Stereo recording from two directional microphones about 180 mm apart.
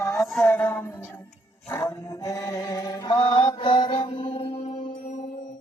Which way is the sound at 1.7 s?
15° left (ahead or behind).